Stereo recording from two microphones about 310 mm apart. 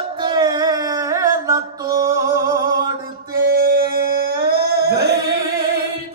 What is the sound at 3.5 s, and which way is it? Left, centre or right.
Singing, right.